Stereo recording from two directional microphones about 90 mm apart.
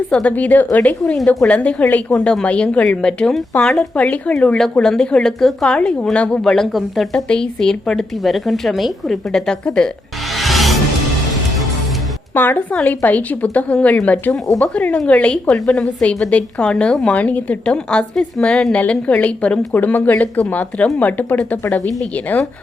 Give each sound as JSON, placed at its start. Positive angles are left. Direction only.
{"t": 0.1, "sound": "a woman's voice", "side_deg": 15}
{"t": 10.3, "sound": "music", "side_deg": 0}
{"t": 12.3, "sound": "a woman's voice", "side_deg": 20}